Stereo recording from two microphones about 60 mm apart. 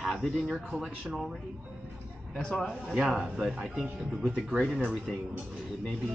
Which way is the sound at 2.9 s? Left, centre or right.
Centre.